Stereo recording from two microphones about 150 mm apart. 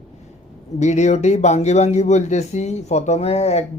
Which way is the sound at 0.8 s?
50° left (ahead or behind).